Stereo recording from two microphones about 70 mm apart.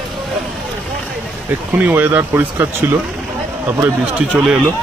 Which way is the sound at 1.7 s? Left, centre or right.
Right.